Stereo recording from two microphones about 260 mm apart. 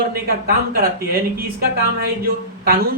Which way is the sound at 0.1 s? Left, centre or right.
Right.